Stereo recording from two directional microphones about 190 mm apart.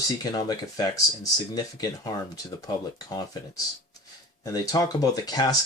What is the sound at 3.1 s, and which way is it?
Speech, 20° left (ahead or behind).